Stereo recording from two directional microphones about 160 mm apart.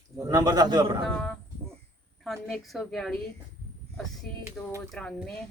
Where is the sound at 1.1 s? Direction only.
5° left (ahead or behind).